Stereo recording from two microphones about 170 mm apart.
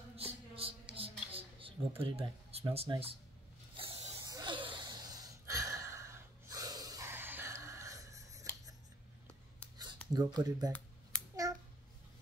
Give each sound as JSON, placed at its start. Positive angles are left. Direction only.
{"t": 0.1, "sound": "a sound", "side_deg": -35}
{"t": 4.3, "sound": "gasp", "side_deg": -25}
{"t": 10.1, "sound": "speech", "side_deg": -20}